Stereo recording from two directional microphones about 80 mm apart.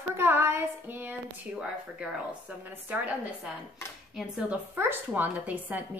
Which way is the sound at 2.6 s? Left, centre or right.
Right.